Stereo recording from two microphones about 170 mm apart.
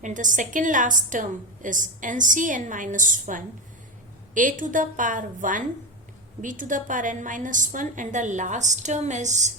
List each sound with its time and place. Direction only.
0.0 s a woman's voice: 50° right (ahead or behind)